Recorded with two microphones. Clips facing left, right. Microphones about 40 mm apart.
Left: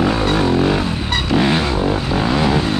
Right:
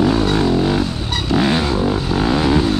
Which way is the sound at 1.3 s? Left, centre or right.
Centre.